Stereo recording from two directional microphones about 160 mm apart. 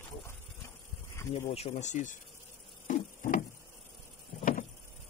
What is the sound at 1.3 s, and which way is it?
Speech, 50° left (ahead or behind).